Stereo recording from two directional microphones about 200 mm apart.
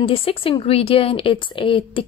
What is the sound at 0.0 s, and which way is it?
Speech, 25° left (ahead or behind).